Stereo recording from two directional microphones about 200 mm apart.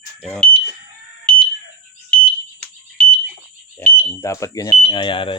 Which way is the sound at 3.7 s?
10° left (ahead or behind).